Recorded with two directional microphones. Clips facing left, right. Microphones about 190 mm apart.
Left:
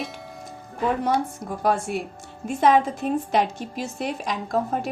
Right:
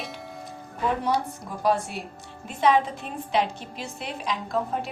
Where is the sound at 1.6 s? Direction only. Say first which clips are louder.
Left 1 dB; 50° left (ahead or behind).